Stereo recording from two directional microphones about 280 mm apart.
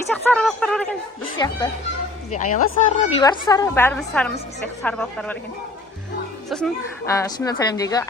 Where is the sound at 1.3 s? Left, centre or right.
Centre.